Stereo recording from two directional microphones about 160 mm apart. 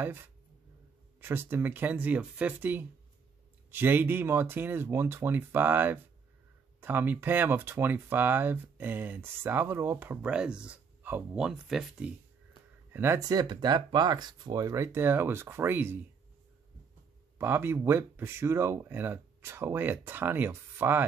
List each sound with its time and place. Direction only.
1.2 s speech: 15° right (ahead or behind)
12.9 s speech: 15° right (ahead or behind)
17.4 s speech: 15° right (ahead or behind)